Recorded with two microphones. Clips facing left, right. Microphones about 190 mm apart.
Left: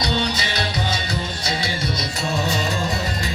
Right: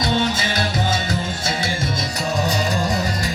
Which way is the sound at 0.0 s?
45° right (ahead or behind).